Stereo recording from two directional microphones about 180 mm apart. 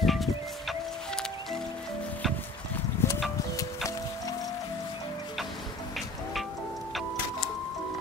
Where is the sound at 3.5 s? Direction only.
20° left (ahead or behind).